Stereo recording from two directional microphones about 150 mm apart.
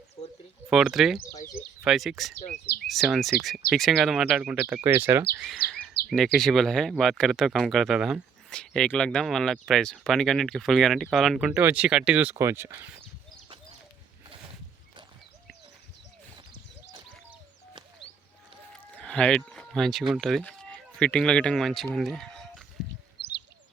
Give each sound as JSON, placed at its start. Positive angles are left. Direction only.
{"t": 0.7, "sound": "speech", "side_deg": -5}
{"t": 5.5, "sound": "bird vocalization", "side_deg": 0}
{"t": 6.1, "sound": "speech", "side_deg": 0}
{"t": 18.7, "sound": "run", "side_deg": 5}
{"t": 19.4, "sound": "speech", "side_deg": 0}
{"t": 21.9, "sound": "a sound", "side_deg": 0}
{"t": 23.2, "sound": "bird", "side_deg": 90}